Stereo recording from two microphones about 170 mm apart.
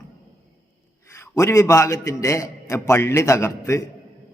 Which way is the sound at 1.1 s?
15° left (ahead or behind).